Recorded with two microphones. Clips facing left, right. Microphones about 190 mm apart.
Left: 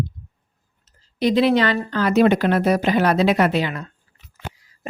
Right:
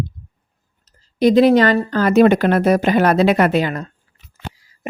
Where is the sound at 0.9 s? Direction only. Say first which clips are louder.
Right 6 dB; 45° right (ahead or behind).